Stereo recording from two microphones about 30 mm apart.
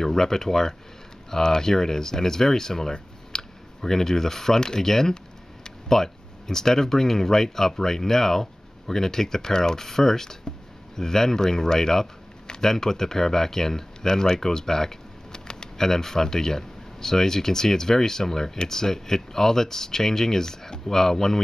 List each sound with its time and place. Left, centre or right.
0.0 s speech: centre
3.3 s a sound: centre
4.6 s speech: left